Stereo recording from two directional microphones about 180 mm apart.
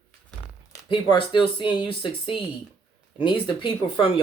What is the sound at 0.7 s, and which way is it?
Speech, 25° left (ahead or behind).